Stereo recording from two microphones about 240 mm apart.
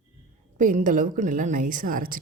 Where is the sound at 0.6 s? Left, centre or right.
Right.